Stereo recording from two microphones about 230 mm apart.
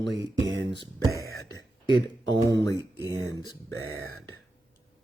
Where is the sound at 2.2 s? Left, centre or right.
Centre.